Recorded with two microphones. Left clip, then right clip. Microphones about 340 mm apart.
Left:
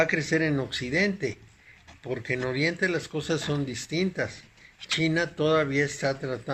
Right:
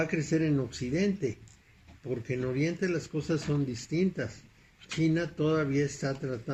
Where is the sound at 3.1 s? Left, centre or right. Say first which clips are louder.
Left 3 dB; left.